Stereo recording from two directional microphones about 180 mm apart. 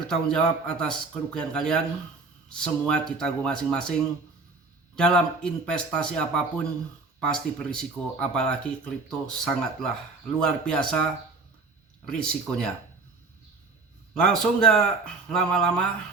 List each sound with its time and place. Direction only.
0.1 s speech: 5° left (ahead or behind)
4.9 s speech: 5° left (ahead or behind)
14.1 s speech: centre (ahead or behind)